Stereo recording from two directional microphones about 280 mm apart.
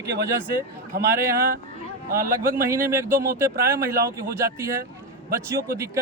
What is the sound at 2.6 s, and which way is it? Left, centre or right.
Speech, centre.